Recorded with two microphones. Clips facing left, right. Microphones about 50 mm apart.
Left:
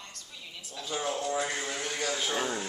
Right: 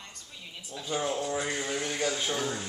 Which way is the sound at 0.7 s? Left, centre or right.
Centre.